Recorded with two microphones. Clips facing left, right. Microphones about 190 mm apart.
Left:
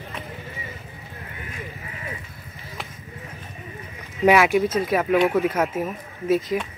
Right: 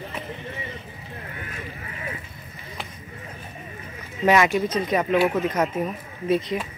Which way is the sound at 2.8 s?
Centre (ahead or behind).